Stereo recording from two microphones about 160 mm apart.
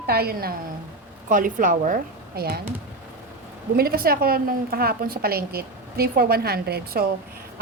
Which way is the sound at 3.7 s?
70° right (ahead or behind).